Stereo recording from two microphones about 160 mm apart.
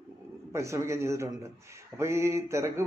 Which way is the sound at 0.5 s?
20° right (ahead or behind).